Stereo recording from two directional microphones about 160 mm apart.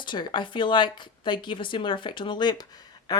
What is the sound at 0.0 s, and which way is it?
A woman's voice, 30° left (ahead or behind).